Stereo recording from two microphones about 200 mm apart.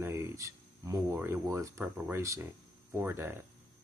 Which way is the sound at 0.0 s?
15° right (ahead or behind).